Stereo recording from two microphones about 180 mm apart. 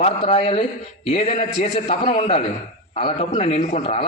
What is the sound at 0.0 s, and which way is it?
A man's voice, 35° left (ahead or behind).